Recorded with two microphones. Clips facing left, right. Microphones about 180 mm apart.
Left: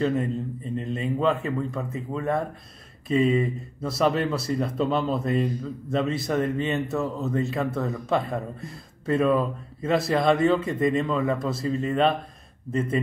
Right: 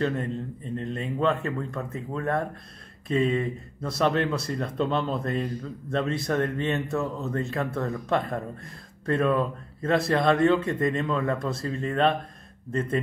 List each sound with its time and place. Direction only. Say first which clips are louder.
0.7 s speech: left 2 dB; centre (ahead or behind)